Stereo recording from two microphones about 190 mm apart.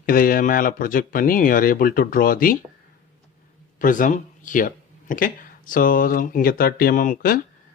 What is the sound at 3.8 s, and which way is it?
Speech, 45° left (ahead or behind).